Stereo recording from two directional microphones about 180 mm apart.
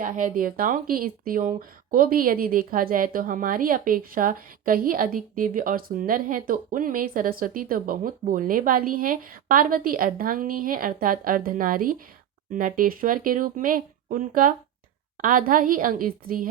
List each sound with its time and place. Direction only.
0.0 s speech: 50° right (ahead or behind)